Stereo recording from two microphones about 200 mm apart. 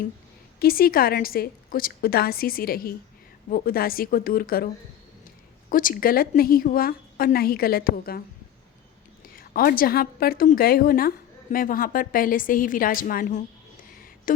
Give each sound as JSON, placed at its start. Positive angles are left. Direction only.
{"t": 0.6, "sound": "a woman's voice", "side_deg": 45}
{"t": 9.3, "sound": "a woman's voice", "side_deg": 45}